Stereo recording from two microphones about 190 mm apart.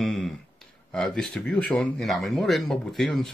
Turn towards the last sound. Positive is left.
turn(degrees=0)  # may be behind; listen again after turning